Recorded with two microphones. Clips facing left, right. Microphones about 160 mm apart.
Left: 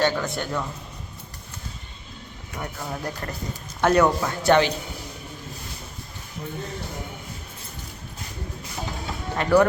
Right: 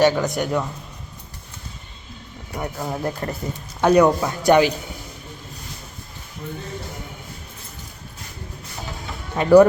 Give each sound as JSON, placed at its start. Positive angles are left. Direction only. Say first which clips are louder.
{"t": 0.0, "sound": "speech", "louder": "right 6 dB", "side_deg": -20}
{"t": 2.6, "sound": "speech", "louder": "right 5 dB", "side_deg": -25}
{"t": 3.8, "sound": "speech", "louder": "right 4 dB", "side_deg": -15}
{"t": 9.4, "sound": "speech", "louder": "right 7 dB", "side_deg": -25}